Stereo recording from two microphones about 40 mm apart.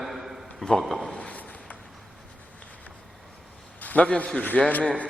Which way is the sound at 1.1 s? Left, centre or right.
Left.